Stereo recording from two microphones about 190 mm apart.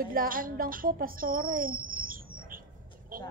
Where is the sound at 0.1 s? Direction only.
50° right (ahead or behind).